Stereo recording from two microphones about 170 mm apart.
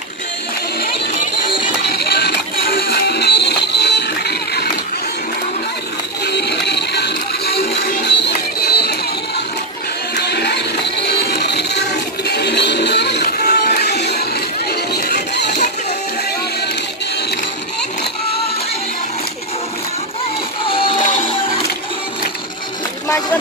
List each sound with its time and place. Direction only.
1.9 s music: 70° left (ahead or behind)
6.2 s music: 75° left (ahead or behind)
10.1 s music: 75° left (ahead or behind)
20.6 s music: 30° left (ahead or behind)
23.0 s vehicle: 20° left (ahead or behind)